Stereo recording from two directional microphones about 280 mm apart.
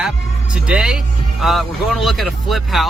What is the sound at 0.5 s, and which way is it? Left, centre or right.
Speech, centre.